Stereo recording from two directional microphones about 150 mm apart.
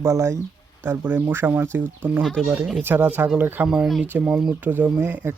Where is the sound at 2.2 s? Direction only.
Centre (ahead or behind).